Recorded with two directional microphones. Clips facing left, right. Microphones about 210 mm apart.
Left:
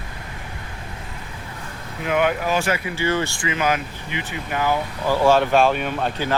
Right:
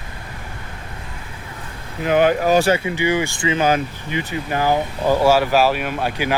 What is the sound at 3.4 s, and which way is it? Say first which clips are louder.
Speech: right 4 dB; 30° right (ahead or behind).